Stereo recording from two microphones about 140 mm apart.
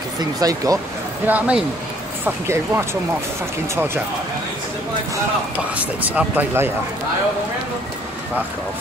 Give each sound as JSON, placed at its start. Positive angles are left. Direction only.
{"t": 0.2, "sound": "speech", "side_deg": -25}
{"t": 1.2, "sound": "speech", "side_deg": -10}
{"t": 5.8, "sound": "speech", "side_deg": -10}